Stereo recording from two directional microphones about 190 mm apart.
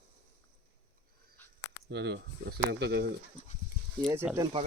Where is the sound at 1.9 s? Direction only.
60° right (ahead or behind).